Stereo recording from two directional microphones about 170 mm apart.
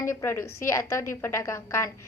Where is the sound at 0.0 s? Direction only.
15° left (ahead or behind).